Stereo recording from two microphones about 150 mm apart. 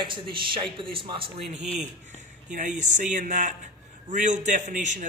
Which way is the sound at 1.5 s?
50° right (ahead or behind).